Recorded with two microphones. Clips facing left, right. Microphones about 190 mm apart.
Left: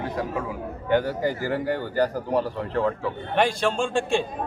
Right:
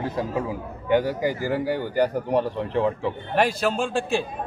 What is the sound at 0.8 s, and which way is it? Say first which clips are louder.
Speech: right 1 dB; 15° right (ahead or behind).